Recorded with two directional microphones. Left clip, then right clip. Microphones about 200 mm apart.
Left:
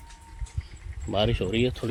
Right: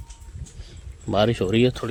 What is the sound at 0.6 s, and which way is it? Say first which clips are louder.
Speech: right 6 dB; 40° right (ahead or behind).